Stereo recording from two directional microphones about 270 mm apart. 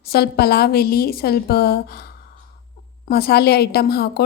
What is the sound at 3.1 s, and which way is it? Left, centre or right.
A woman's voice, left.